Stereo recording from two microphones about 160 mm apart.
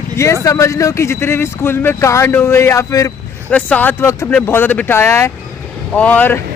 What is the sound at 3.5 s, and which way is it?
Speech, 10° left (ahead or behind).